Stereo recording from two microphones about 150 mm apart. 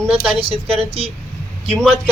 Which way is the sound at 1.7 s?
5° left (ahead or behind).